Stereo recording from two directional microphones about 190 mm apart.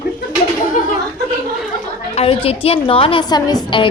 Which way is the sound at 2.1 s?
30° left (ahead or behind).